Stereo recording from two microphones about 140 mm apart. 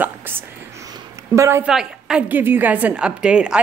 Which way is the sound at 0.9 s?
20° right (ahead or behind).